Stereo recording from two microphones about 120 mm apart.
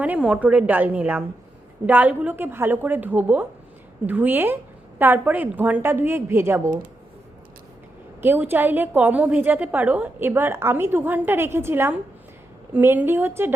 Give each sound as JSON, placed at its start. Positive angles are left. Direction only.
{"t": 0.0, "sound": "a woman's voice", "side_deg": -10}
{"t": 8.2, "sound": "a woman's voice", "side_deg": -15}